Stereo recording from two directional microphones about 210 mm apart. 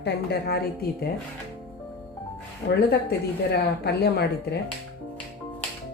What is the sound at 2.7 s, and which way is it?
Speech, 50° left (ahead or behind).